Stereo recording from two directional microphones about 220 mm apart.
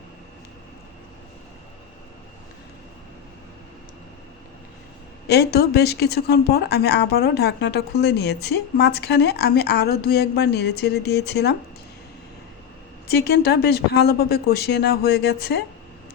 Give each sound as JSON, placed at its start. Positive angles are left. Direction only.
{"t": 5.3, "sound": "speech", "side_deg": 45}
{"t": 13.1, "sound": "speech", "side_deg": 45}